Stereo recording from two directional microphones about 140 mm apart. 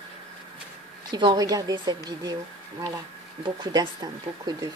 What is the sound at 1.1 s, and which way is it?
Speech, 30° right (ahead or behind).